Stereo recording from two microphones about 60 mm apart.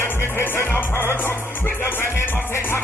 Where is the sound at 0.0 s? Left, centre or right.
Left.